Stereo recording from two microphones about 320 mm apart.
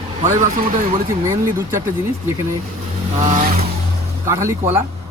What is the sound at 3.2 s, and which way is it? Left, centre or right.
Speech, right.